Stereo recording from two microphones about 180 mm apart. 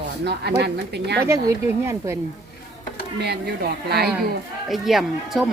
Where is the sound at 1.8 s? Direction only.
15° right (ahead or behind).